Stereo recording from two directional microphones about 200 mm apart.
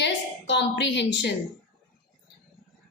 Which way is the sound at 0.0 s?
65° left (ahead or behind).